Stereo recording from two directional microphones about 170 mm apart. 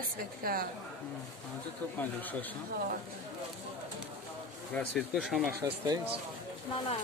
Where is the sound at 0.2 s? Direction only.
60° right (ahead or behind).